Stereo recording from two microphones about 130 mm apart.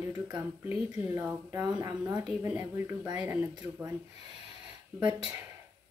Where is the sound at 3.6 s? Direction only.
25° right (ahead or behind).